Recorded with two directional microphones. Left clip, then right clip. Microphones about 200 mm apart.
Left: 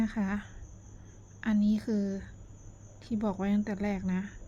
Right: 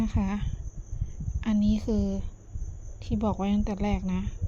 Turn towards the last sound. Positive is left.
turn(degrees=-15)  # may be behind; listen again after turning